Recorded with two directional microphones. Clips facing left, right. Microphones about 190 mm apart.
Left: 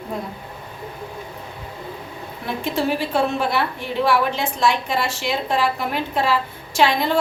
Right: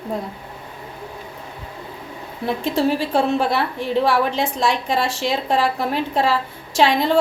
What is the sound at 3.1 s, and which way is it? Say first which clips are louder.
A woman's voice: right 2 dB; 35° right (ahead or behind).